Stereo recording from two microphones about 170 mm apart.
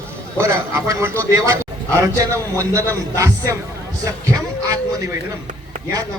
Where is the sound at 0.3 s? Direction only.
15° right (ahead or behind).